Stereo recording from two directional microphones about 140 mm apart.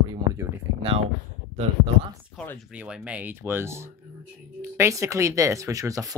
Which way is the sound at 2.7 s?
10° right (ahead or behind).